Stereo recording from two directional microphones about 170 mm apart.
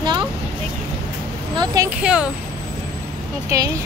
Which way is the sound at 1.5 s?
20° right (ahead or behind).